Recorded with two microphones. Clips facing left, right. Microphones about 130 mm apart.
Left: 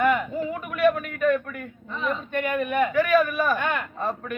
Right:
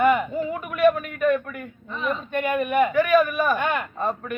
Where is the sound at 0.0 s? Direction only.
15° right (ahead or behind).